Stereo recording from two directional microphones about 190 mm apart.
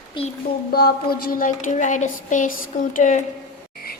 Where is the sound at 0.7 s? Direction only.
55° left (ahead or behind).